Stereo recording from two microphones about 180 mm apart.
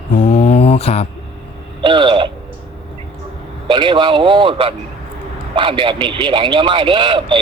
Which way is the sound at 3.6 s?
25° right (ahead or behind).